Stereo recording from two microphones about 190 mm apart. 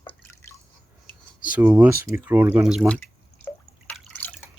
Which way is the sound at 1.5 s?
10° right (ahead or behind).